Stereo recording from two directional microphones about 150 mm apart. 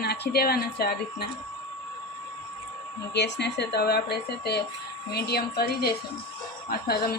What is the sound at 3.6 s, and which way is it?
Speech, 90° left.